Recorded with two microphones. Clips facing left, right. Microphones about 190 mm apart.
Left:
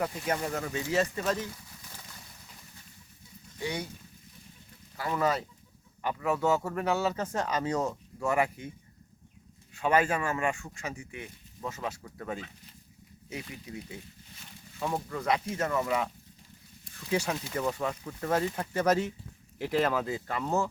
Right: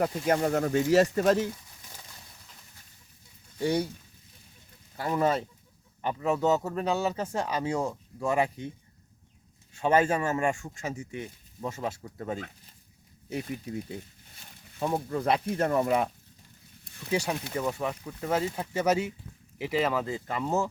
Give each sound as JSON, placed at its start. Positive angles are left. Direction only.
{"t": 0.0, "sound": "speech", "side_deg": -45}
{"t": 3.6, "sound": "speech", "side_deg": -35}
{"t": 4.9, "sound": "speech", "side_deg": -30}
{"t": 9.7, "sound": "speech", "side_deg": -25}
{"t": 10.8, "sound": "speech", "side_deg": -40}
{"t": 13.3, "sound": "speech", "side_deg": -45}
{"t": 15.1, "sound": "speech", "side_deg": -30}
{"t": 17.1, "sound": "speech", "side_deg": -15}